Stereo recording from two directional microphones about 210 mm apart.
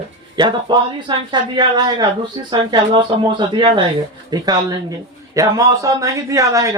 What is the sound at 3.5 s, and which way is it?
A man's voice, 20° right (ahead or behind).